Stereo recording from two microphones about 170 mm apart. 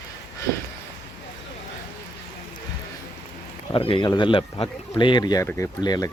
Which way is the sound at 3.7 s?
30° left (ahead or behind).